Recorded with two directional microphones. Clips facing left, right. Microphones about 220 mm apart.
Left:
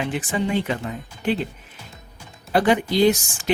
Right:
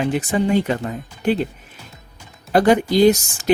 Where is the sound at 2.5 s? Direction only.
45° right (ahead or behind).